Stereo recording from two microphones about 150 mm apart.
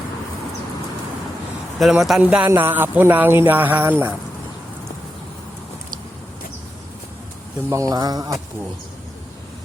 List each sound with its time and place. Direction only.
1.8 s a man's voice: centre (ahead or behind)
7.7 s speech: 25° right (ahead or behind)